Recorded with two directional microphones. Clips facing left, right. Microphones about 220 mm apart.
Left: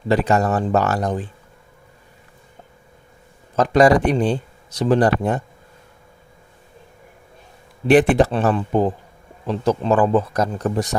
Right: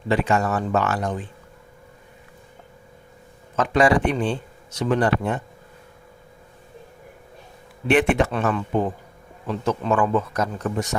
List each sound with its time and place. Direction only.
0.1 s speech: 40° left (ahead or behind)
3.5 s speech: 35° left (ahead or behind)
7.9 s speech: 35° left (ahead or behind)